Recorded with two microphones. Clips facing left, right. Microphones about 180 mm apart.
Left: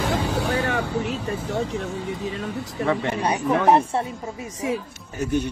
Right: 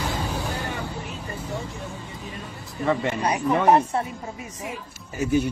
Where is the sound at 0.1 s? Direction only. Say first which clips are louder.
Left 6 dB; 80° left.